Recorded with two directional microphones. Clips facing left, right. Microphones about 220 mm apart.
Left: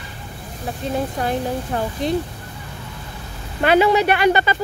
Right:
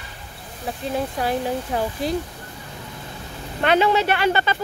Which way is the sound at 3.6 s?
10° left (ahead or behind).